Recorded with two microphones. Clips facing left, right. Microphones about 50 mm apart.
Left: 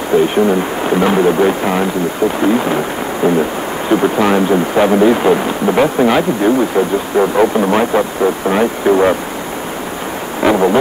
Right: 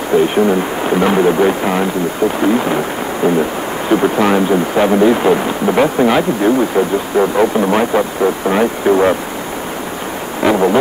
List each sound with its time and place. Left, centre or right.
0.5 s speech: centre
3.9 s speech: centre
4.5 s speech: centre
7.2 s speech: centre
8.2 s speech: centre
8.8 s speech: centre
10.4 s a sound: left